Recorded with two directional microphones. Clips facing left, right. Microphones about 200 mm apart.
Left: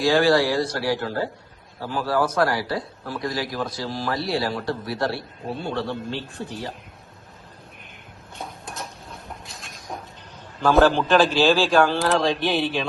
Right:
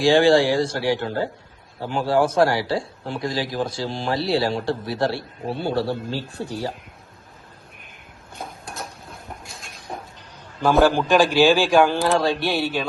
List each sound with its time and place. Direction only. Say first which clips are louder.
0.0 s a man's voice: right 3 dB; 25° right (ahead or behind)
8.4 s a sound: right 1 dB; centre (ahead or behind)
10.8 s a man's voice: right 1 dB; 10° right (ahead or behind)
11.9 s speech: right 1 dB; centre (ahead or behind)